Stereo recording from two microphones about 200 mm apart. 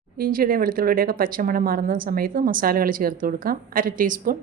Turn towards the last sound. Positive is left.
turn(degrees=-45)  # may be behind; listen again after turning